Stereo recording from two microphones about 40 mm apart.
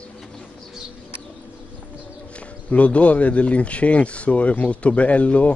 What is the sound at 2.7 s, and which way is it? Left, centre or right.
Speech, left.